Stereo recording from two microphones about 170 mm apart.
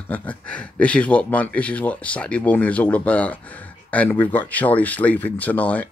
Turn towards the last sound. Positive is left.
turn(degrees=10)  # may be behind; listen again after turning